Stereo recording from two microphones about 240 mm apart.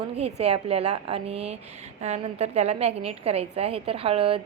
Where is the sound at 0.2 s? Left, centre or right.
Right.